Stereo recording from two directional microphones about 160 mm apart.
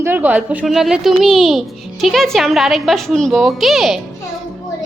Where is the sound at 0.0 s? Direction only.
10° right (ahead or behind).